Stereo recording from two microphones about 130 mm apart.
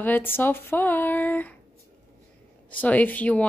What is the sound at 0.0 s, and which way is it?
A woman's voice, 15° left (ahead or behind).